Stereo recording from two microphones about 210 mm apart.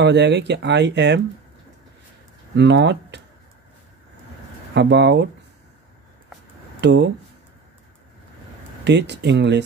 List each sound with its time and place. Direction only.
0.0 s speech: 55° right (ahead or behind)
2.5 s speech: 55° right (ahead or behind)
4.7 s speech: 55° right (ahead or behind)
6.8 s speech: 55° right (ahead or behind)
8.8 s speech: 55° right (ahead or behind)